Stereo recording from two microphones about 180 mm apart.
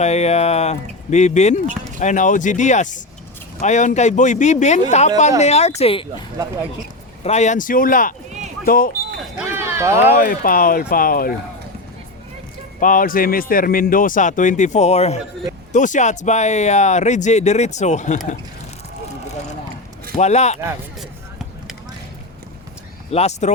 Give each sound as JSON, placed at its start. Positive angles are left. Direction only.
{"t": 0.0, "sound": "a man's voice", "side_deg": 35}
{"t": 7.3, "sound": "a man's voice", "side_deg": 40}
{"t": 9.6, "sound": "a sound", "side_deg": -15}
{"t": 10.2, "sound": "a man's voice", "side_deg": 50}
{"t": 12.8, "sound": "a man's voice", "side_deg": 50}
{"t": 20.1, "sound": "speech", "side_deg": 40}
{"t": 23.1, "sound": "speech", "side_deg": 40}